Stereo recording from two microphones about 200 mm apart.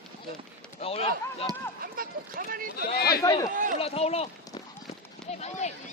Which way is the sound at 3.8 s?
30° left (ahead or behind).